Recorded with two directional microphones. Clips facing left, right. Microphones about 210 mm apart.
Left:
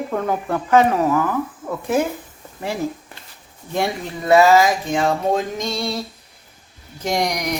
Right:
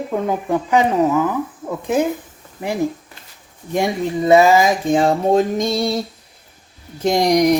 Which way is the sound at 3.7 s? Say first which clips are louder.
Right 4 dB; 15° right (ahead or behind).